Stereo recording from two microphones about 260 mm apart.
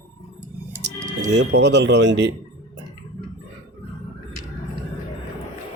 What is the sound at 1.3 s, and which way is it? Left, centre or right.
Speech, right.